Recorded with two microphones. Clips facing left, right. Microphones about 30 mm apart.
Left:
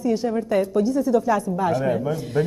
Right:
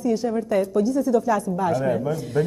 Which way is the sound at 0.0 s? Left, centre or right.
Left.